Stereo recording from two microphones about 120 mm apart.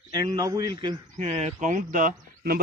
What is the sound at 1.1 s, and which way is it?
Speech, 85° right.